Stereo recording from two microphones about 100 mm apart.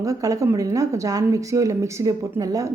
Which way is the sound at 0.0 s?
35° right (ahead or behind).